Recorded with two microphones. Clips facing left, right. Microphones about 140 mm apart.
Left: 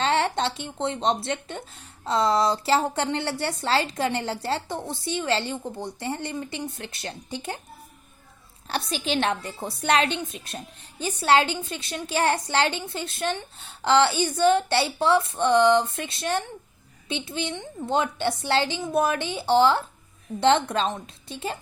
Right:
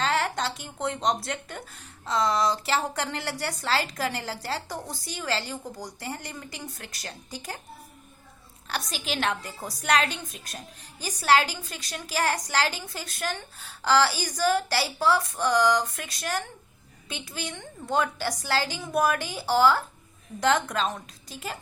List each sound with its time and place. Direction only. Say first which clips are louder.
0.0 s a woman's voice: left 3 dB; 25° left (ahead or behind)
8.7 s a woman's voice: left 5 dB; 30° left (ahead or behind)